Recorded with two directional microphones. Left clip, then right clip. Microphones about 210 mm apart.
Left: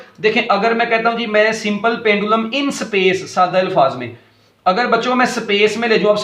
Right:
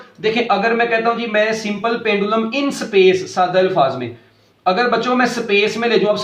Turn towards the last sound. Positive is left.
turn(degrees=40)  # may be behind; listen again after turning